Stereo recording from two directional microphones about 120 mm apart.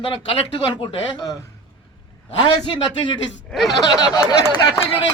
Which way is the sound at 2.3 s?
40° left (ahead or behind).